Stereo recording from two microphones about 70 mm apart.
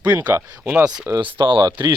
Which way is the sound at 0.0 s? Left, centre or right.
Right.